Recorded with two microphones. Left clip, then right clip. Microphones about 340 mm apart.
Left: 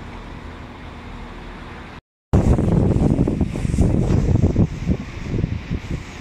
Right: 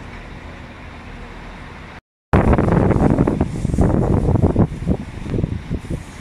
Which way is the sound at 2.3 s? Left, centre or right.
Right.